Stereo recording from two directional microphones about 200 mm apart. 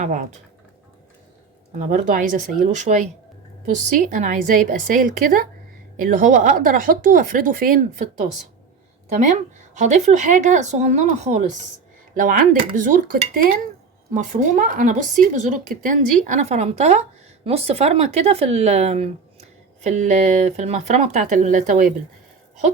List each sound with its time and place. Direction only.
0.0 s a woman's voice: 40° right (ahead or behind)
1.9 s a woman's voice: 40° right (ahead or behind)